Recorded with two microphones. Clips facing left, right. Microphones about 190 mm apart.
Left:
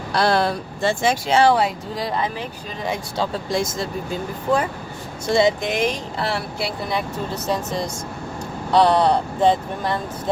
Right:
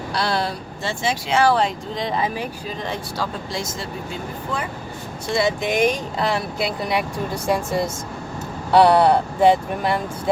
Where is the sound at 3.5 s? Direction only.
50° left (ahead or behind).